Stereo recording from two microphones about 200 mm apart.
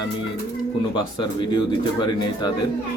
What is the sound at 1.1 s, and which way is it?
Speech, 20° left (ahead or behind).